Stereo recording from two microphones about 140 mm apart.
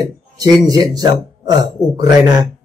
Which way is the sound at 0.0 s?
25° right (ahead or behind).